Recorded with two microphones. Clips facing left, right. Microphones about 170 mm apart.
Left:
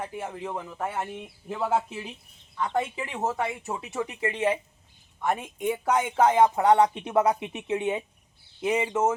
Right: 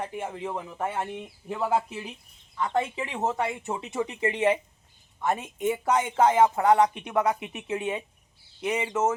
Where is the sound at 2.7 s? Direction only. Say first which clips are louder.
Right 1 dB; 5° left (ahead or behind).